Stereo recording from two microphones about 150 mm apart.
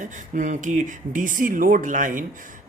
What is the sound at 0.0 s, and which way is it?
Speech, 55° right (ahead or behind).